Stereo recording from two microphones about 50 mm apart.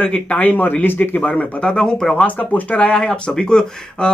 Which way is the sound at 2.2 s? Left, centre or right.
Left.